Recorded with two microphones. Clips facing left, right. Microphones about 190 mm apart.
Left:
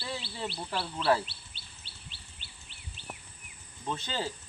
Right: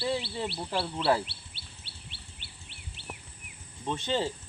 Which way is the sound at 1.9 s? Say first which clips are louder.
Right 3 dB; 65° right (ahead or behind).